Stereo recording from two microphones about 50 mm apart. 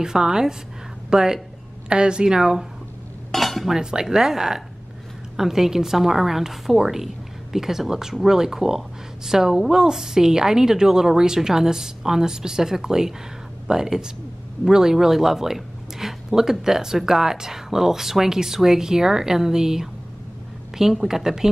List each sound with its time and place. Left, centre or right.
0.0 s speech: centre
3.3 s cutlery: centre
3.7 s a woman's voice: centre